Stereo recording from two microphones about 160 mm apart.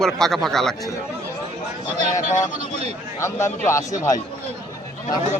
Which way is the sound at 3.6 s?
20° left (ahead or behind).